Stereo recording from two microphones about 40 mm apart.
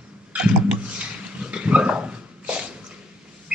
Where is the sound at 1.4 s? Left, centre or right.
Right.